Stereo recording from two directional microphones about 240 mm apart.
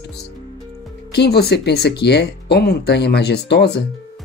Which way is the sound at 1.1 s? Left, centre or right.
Left.